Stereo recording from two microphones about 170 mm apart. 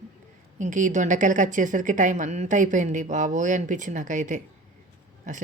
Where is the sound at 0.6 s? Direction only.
50° right (ahead or behind).